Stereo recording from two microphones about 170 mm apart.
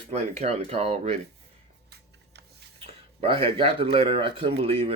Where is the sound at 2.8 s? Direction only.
30° right (ahead or behind).